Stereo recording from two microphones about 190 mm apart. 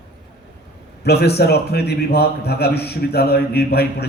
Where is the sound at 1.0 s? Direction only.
60° left (ahead or behind).